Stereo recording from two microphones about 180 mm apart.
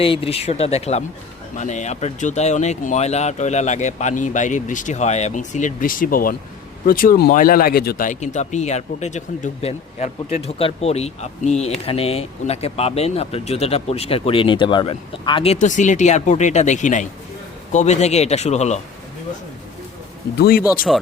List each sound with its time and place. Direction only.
0.0 s speech: 30° left (ahead or behind)
15.5 s speech: 45° left (ahead or behind)
20.4 s speech: 55° left (ahead or behind)
20.9 s speech: centre (ahead or behind)